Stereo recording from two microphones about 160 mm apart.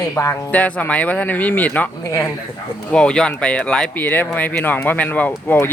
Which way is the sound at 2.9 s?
5° left (ahead or behind).